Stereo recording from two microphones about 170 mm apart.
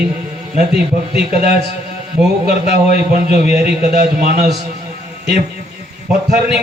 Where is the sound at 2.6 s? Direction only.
60° right (ahead or behind).